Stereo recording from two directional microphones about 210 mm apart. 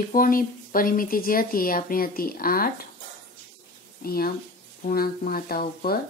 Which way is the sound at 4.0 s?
45° left (ahead or behind).